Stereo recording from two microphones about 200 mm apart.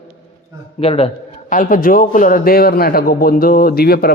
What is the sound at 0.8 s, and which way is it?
A man's voice, 30° left (ahead or behind).